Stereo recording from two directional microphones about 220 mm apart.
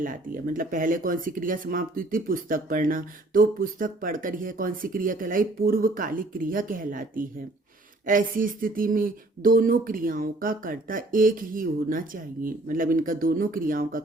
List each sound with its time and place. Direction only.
0.0 s speech: 40° right (ahead or behind)